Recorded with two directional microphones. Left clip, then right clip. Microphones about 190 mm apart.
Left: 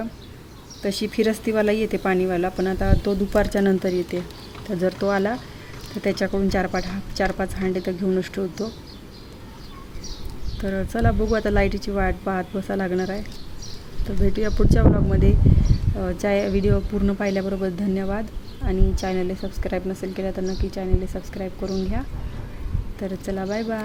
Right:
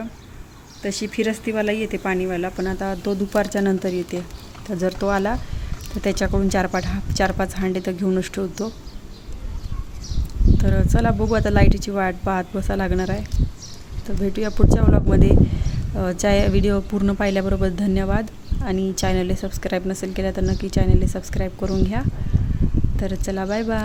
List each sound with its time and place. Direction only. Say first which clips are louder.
0.8 s speech: left 1 dB; 10° right (ahead or behind)
10.6 s speech: right 1 dB; 15° right (ahead or behind)
14.3 s speech: right 2 dB; 15° right (ahead or behind)